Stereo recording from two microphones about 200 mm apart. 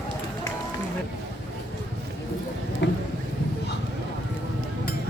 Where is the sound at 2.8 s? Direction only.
65° left (ahead or behind).